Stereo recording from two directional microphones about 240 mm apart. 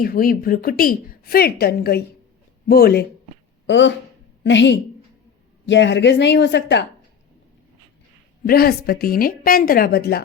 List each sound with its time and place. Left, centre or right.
0.0 s a woman's voice: left
8.4 s a woman's voice: left